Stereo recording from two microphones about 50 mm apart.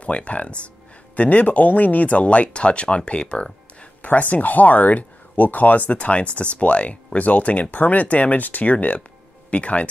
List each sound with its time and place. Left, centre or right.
0.0 s speech: left
4.0 s speech: left